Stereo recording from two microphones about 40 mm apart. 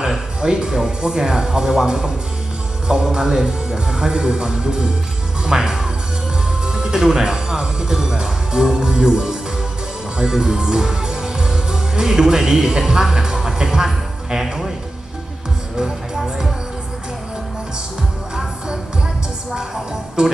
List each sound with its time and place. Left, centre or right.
0.1 s speech: centre
14.3 s speech: centre
15.8 s music: centre
19.5 s speech: centre